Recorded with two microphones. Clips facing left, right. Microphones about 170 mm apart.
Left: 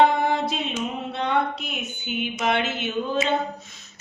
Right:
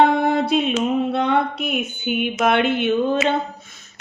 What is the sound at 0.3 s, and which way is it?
Music, 65° right (ahead or behind).